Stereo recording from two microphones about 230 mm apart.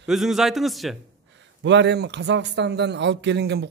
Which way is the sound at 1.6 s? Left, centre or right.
Right.